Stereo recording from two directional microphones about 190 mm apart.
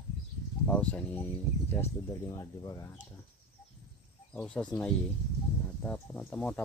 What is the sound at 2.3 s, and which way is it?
Speech, 15° left (ahead or behind).